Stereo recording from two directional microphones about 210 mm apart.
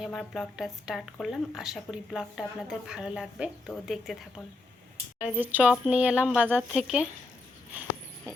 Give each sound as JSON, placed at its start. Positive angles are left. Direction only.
{"t": 0.0, "sound": "speech", "side_deg": 0}
{"t": 5.2, "sound": "speech", "side_deg": -10}